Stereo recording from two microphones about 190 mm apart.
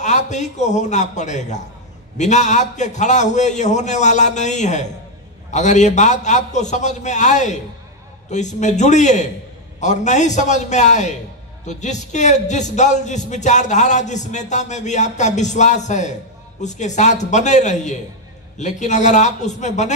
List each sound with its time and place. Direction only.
0.0 s a man's voice: 40° left (ahead or behind)